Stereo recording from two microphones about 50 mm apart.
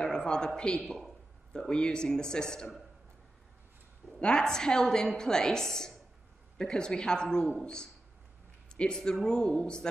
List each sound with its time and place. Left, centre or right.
0.0 s a sound: centre
0.6 s a woman's voice: centre
4.2 s a woman's voice: centre